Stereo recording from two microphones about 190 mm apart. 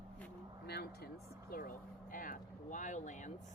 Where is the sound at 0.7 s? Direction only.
55° left (ahead or behind); by 3.3 s 40° left (ahead or behind).